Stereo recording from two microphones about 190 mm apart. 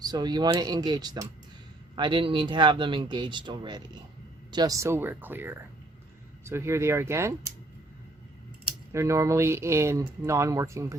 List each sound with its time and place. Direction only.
0.0 s speech: 20° right (ahead or behind)
8.9 s speech: 15° right (ahead or behind)